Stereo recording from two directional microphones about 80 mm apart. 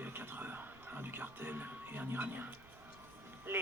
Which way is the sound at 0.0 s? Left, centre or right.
Right.